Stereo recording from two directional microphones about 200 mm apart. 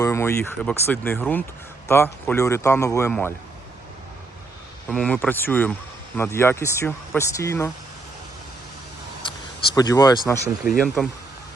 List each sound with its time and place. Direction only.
0.0 s speech: 15° left (ahead or behind)
4.9 s speech: 5° left (ahead or behind)
9.7 s speech: 20° left (ahead or behind)
10.8 s speech: centre (ahead or behind)